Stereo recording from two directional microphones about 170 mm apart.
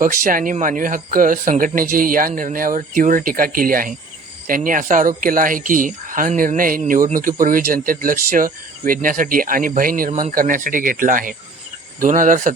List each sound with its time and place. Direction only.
0.0 s speech: 55° right (ahead or behind)